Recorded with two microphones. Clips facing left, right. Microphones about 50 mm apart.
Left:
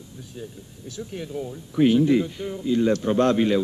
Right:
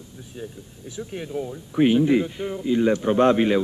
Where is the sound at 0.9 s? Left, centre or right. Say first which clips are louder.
Right 2 dB; centre.